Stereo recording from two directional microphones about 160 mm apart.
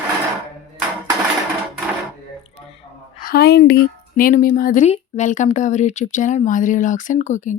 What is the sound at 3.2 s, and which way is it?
Speech, 85° left.